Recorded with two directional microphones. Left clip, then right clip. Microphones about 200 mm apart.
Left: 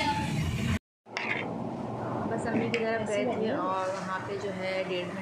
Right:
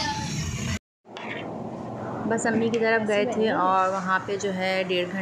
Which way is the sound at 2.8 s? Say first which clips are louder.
Right 7 dB; 55° right (ahead or behind).